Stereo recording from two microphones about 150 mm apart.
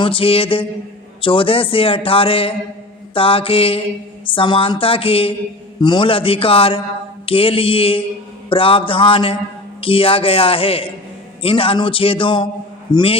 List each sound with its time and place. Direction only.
0.0 s a man's voice: 35° left (ahead or behind)